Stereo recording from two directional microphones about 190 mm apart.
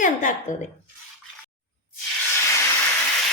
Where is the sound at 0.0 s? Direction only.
45° left (ahead or behind).